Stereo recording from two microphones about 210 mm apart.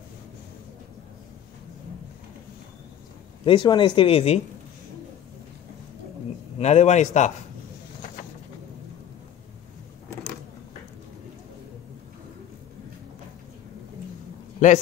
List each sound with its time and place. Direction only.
3.4 s speech: 20° left (ahead or behind)
6.6 s speech: 35° left (ahead or behind)
14.6 s speech: 40° left (ahead or behind)